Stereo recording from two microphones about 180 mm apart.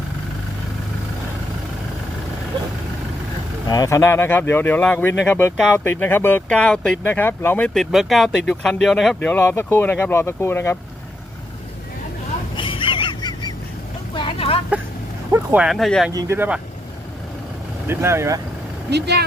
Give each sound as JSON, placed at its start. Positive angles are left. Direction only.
{"t": 3.7, "sound": "speech", "side_deg": 20}
{"t": 12.5, "sound": "a sound", "side_deg": 30}
{"t": 14.1, "sound": "vehicle", "side_deg": 30}
{"t": 15.3, "sound": "speech", "side_deg": -10}
{"t": 16.1, "sound": "speech", "side_deg": -15}
{"t": 17.8, "sound": "speech", "side_deg": -15}
{"t": 18.9, "sound": "speech", "side_deg": -65}